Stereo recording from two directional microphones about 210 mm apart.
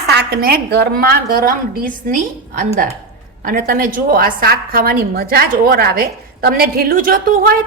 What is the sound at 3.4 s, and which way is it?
A woman's voice, 40° right (ahead or behind).